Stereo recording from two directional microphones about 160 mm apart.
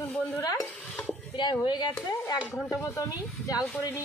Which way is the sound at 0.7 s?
10° left (ahead or behind).